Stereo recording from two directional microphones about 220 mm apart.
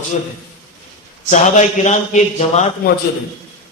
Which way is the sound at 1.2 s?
30° left (ahead or behind).